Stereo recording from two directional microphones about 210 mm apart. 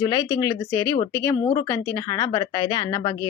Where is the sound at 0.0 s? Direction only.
20° left (ahead or behind).